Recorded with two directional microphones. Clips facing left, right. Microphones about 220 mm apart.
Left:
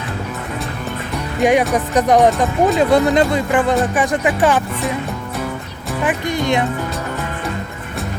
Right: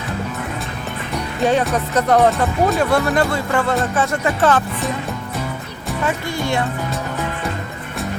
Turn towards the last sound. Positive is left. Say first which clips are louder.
# left 3 dB
turn(degrees=20)  # may be behind; listen again after turning